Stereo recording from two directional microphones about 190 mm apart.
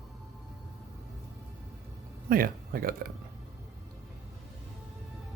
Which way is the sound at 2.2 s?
50° right (ahead or behind).